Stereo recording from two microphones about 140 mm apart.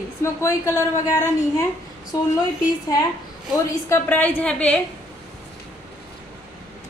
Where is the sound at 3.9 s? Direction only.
10° left (ahead or behind).